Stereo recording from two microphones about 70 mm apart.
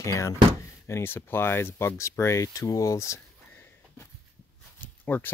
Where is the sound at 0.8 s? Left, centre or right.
Left.